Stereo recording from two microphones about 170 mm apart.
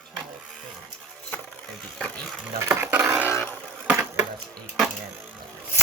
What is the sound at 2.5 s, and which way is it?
Speech, 15° right (ahead or behind).